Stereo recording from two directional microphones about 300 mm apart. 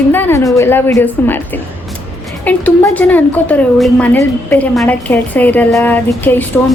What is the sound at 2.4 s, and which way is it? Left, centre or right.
A woman's voice, centre.